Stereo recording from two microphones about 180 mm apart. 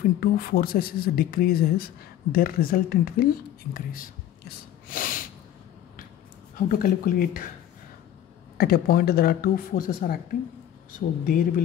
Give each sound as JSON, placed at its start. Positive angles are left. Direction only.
{"t": 0.2, "sound": "speech", "side_deg": 55}
{"t": 6.7, "sound": "speech", "side_deg": 50}
{"t": 8.5, "sound": "speech", "side_deg": 55}